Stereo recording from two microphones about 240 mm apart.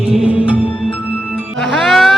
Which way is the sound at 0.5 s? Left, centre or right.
Left.